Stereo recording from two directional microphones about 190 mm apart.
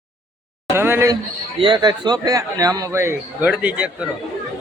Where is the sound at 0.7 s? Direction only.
10° right (ahead or behind).